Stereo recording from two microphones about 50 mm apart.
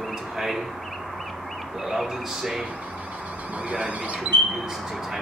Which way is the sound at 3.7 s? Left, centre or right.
Right.